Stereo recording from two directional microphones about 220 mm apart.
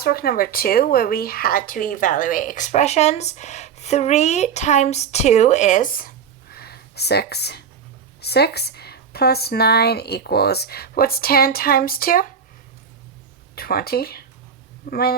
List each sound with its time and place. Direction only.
0.0 s speech: 45° left (ahead or behind)
13.6 s speech: 45° left (ahead or behind)